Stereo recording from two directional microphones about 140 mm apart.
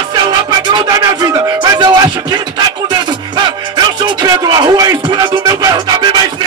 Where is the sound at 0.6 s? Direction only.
30° right (ahead or behind).